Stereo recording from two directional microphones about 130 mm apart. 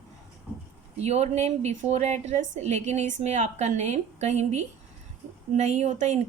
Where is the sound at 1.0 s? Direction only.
55° right (ahead or behind).